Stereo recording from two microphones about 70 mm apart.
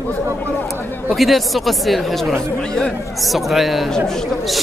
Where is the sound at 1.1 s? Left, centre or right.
Centre.